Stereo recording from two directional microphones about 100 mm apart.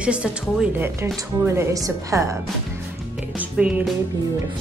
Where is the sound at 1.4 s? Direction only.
25° right (ahead or behind).